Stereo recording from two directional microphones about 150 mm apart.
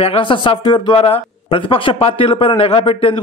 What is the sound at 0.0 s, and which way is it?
Speech, 35° left (ahead or behind).